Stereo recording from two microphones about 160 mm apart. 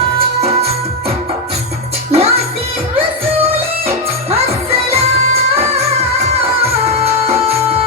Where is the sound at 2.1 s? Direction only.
40° right (ahead or behind).